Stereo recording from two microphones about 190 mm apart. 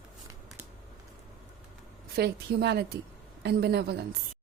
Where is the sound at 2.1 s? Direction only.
60° right (ahead or behind).